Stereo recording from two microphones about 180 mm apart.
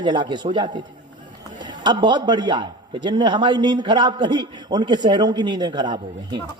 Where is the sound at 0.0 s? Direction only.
25° right (ahead or behind).